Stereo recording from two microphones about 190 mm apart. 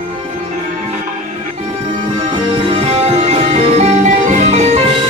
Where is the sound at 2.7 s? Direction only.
30° right (ahead or behind).